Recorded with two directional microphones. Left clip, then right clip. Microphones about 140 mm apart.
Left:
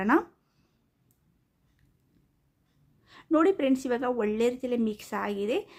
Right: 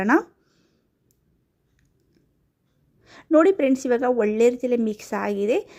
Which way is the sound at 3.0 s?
40° right (ahead or behind).